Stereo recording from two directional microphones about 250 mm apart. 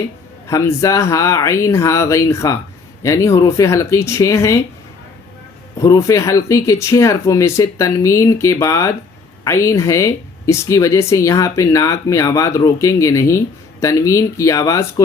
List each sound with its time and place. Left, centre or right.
0.4 s speech: centre
5.8 s speech: centre